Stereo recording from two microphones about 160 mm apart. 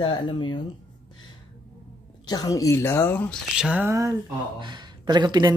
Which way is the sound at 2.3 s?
25° left (ahead or behind).